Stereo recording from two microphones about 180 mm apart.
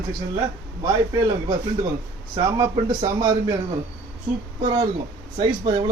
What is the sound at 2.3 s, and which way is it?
Speech, 25° right (ahead or behind).